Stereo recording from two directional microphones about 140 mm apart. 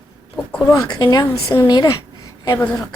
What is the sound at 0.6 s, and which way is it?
A woman's voice, 30° left (ahead or behind).